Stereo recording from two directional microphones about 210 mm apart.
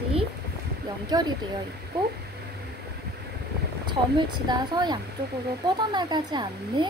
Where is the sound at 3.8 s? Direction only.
20° right (ahead or behind).